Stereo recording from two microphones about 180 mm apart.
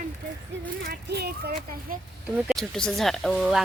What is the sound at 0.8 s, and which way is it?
Speech, 60° right (ahead or behind).